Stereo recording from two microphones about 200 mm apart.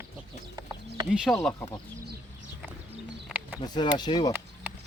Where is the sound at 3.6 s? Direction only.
20° left (ahead or behind).